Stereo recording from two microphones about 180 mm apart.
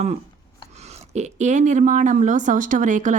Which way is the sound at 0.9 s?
40° right (ahead or behind).